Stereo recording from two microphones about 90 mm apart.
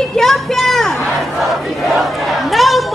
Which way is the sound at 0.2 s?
Centre (ahead or behind).